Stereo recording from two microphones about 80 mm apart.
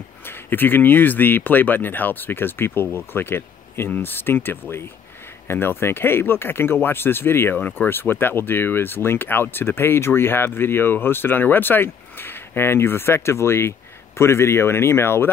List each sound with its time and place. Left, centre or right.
0.3 s speech: left